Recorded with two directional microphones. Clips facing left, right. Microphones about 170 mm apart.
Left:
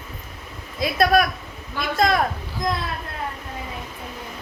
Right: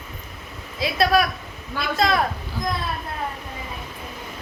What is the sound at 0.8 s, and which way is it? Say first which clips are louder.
Speech: left 1 dB; 50° left (ahead or behind).